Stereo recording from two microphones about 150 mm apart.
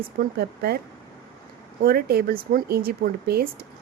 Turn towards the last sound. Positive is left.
turn(degrees=-85)